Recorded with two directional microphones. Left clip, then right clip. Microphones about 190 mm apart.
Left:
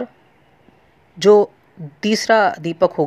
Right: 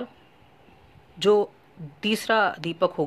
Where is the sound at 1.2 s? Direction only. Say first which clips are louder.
Left 9 dB; 20° left (ahead or behind).